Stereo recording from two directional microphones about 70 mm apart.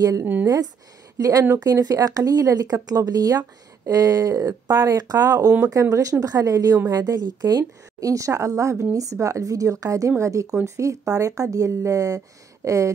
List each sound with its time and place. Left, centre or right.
0.2 s speech: right
1.1 s a woman's voice: right
5.6 s a woman's voice: right